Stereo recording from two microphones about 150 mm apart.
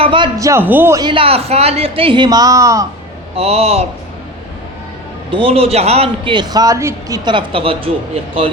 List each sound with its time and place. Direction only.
0.0 s a sound: 35° right (ahead or behind)
0.3 s a man's voice: 20° right (ahead or behind)
0.9 s a man's voice: 35° right (ahead or behind)
3.3 s a man's voice: 45° right (ahead or behind)
5.3 s a man's voice: 40° right (ahead or behind); by 7.2 s 20° right (ahead or behind)
7.3 s a man's voice: 35° right (ahead or behind)